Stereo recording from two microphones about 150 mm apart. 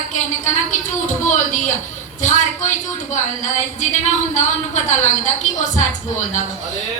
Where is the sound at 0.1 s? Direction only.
55° left (ahead or behind).